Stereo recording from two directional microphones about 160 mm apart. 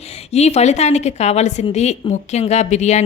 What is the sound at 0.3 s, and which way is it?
A woman's voice, 40° left (ahead or behind).